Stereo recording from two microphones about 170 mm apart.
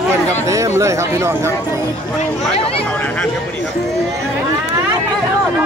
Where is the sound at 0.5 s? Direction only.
15° right (ahead or behind).